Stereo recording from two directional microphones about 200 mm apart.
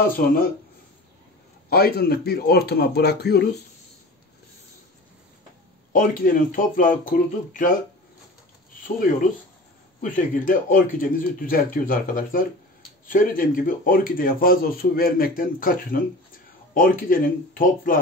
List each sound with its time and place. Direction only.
0.2 s speech: 45° left (ahead or behind)
1.7 s speech: 50° left (ahead or behind)
5.9 s speech: 45° left (ahead or behind)
10.1 s speech: 40° left (ahead or behind)